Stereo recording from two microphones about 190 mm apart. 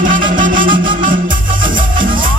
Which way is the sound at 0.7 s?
25° right (ahead or behind).